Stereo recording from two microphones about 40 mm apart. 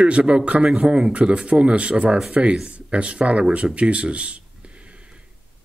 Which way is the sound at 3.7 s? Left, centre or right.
Right.